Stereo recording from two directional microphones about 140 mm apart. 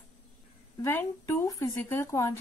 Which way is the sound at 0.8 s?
20° left (ahead or behind).